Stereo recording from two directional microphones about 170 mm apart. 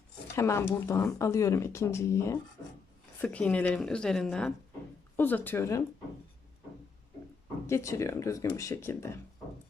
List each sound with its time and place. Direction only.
0.3 s speech: 15° left (ahead or behind)
3.2 s speech: 5° left (ahead or behind)
7.7 s speech: 15° left (ahead or behind)